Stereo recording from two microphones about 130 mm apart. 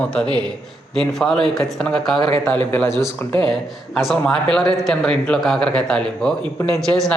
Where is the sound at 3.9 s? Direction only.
5° left (ahead or behind).